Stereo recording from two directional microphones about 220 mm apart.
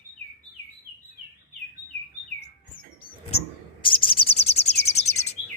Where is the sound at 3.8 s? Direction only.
25° left (ahead or behind).